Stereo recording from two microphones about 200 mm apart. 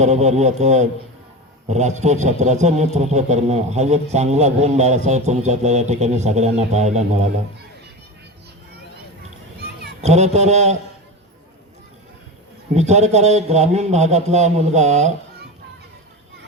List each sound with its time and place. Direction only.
0.0 s speech: 35° right (ahead or behind)
10.0 s speech: 35° right (ahead or behind)
12.7 s speech: 35° right (ahead or behind)